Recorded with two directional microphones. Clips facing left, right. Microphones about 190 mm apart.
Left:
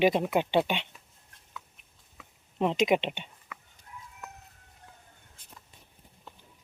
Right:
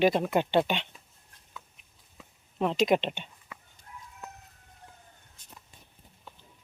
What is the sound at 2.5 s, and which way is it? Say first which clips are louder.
Speech: even; 20° left (ahead or behind).